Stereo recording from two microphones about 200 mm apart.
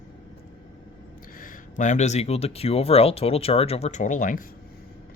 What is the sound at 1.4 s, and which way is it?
Speech, 40° left (ahead or behind).